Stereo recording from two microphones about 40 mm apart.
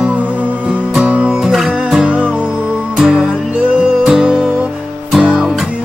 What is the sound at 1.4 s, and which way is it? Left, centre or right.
Music, centre.